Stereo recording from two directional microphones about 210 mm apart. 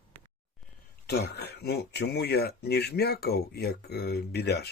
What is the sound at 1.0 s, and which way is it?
Speech, 50° left (ahead or behind).